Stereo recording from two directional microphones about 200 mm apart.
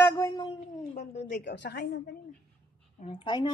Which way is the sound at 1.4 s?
60° left (ahead or behind).